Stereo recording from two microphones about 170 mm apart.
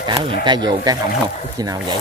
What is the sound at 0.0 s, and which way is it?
Speech, 25° right (ahead or behind).